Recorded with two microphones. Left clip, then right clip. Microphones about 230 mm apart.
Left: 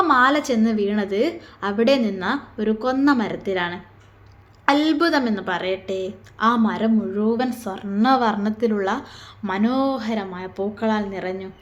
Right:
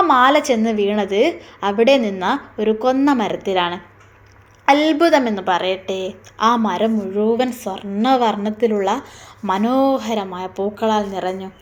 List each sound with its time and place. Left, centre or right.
0.0 s a woman's voice: centre
1.0 s a woman's voice: left
1.6 s a woman's voice: centre